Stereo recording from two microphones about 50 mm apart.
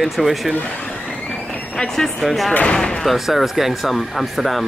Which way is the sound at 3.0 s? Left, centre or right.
Centre.